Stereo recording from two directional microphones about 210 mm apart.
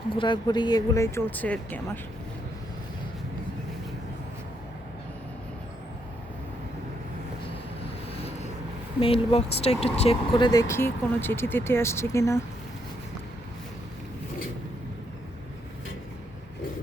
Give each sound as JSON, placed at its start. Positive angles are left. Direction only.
{"t": 0.2, "sound": "speech", "side_deg": 20}
{"t": 9.0, "sound": "speech", "side_deg": 25}
{"t": 10.7, "sound": "speech", "side_deg": 10}